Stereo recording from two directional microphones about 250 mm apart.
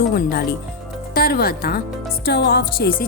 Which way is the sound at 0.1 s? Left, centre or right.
Left.